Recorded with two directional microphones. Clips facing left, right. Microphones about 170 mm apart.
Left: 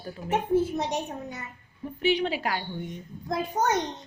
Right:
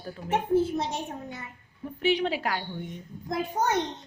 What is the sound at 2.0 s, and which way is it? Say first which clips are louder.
Speech: even; centre (ahead or behind).